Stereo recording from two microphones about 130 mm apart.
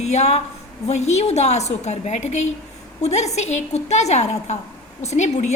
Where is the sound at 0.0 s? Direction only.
60° left (ahead or behind).